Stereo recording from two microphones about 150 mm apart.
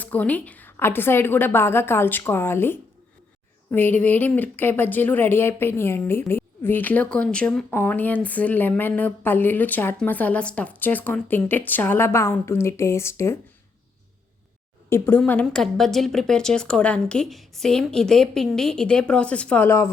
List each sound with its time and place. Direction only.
0.0 s speech: 10° left (ahead or behind)
14.8 s a woman's voice: 15° left (ahead or behind)